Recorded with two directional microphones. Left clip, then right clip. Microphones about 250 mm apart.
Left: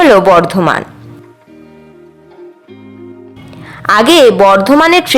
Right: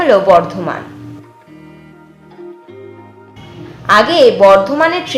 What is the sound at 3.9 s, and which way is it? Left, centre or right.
A woman's voice, left.